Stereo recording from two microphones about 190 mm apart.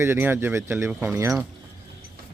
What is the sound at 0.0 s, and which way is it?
Speech, 10° right (ahead or behind).